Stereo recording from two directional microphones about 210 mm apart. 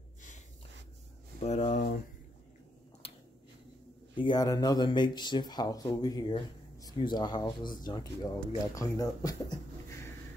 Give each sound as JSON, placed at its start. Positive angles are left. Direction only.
{"t": 1.4, "sound": "speech", "side_deg": 35}
{"t": 3.0, "sound": "a sound", "side_deg": 25}
{"t": 4.2, "sound": "a man's voice", "side_deg": 20}